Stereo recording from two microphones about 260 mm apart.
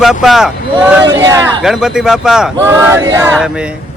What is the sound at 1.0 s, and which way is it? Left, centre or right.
Speech, centre.